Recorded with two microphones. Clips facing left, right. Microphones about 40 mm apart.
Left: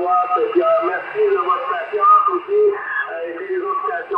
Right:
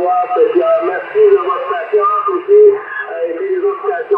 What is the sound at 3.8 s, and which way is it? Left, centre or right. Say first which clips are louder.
Speech: right 7 dB; centre.